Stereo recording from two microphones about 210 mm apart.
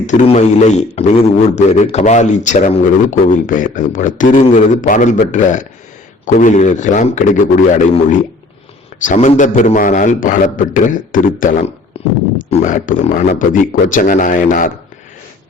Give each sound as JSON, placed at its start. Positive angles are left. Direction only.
{"t": 0.0, "sound": "a man's voice", "side_deg": 35}
{"t": 9.0, "sound": "a man's voice", "side_deg": 35}
{"t": 11.9, "sound": "a sound", "side_deg": 30}
{"t": 12.5, "sound": "a man's voice", "side_deg": 35}